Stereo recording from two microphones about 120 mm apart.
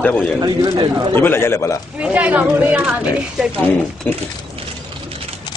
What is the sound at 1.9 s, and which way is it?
Speech, 10° right (ahead or behind).